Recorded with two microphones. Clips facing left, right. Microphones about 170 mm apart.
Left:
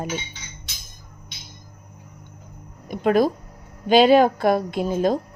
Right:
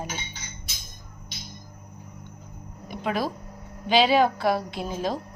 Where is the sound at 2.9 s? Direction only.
50° left (ahead or behind).